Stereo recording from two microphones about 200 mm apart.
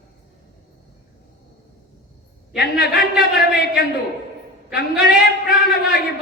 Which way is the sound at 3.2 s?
Centre (ahead or behind).